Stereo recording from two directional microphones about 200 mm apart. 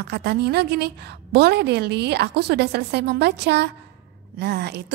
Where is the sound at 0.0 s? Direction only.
55° right (ahead or behind).